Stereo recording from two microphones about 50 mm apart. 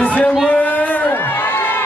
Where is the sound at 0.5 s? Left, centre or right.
Left.